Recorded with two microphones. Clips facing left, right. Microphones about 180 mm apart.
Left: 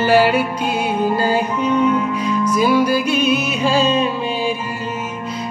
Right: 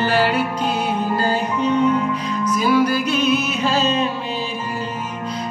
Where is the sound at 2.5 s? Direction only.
10° left (ahead or behind).